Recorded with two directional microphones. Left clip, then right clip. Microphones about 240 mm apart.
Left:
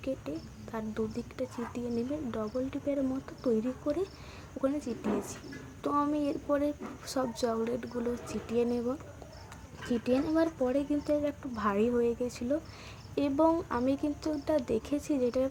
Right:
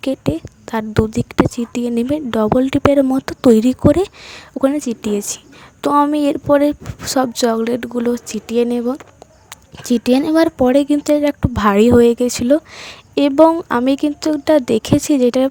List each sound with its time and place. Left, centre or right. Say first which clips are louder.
0.0 s speech: right 17 dB; right